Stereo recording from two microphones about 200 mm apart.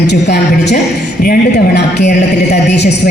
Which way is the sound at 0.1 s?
60° left (ahead or behind).